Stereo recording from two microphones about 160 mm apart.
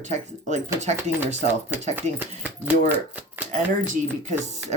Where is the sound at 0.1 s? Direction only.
45° right (ahead or behind).